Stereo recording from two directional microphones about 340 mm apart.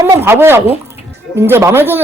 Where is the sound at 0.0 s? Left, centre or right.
Centre.